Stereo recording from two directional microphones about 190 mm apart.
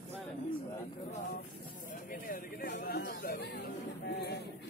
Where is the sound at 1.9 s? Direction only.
45° left (ahead or behind).